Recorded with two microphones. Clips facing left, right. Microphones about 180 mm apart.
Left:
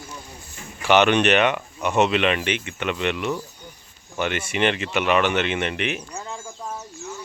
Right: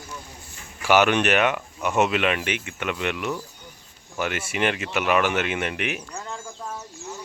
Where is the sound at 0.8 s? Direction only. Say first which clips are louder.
Left 2 dB; 5° right (ahead or behind).